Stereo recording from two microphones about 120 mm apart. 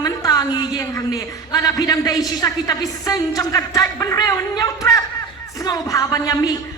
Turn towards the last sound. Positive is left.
turn(degrees=30)  # may be behind; listen again after turning